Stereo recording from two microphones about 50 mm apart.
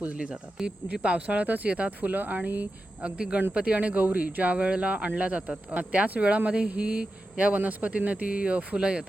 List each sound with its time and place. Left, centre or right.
0.0 s speech: right
3.0 s speech: right